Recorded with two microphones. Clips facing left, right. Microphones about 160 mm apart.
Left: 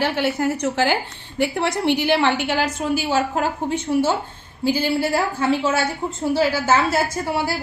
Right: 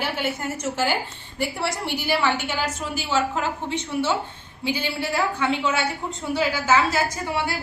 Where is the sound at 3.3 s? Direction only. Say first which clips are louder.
Left 4 dB; 40° left (ahead or behind).